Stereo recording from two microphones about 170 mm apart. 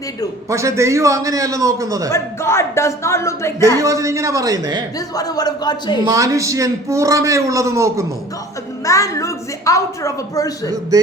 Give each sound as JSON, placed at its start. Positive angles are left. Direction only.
{"t": 0.5, "sound": "a man's voice", "side_deg": -20}
{"t": 2.1, "sound": "speech", "side_deg": 15}
{"t": 3.8, "sound": "a man's voice", "side_deg": -20}
{"t": 4.9, "sound": "a woman's voice", "side_deg": 20}
{"t": 6.1, "sound": "a man's voice", "side_deg": -20}
{"t": 8.8, "sound": "a woman's voice", "side_deg": 20}